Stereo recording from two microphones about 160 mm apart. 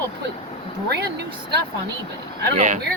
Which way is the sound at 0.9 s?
90° right.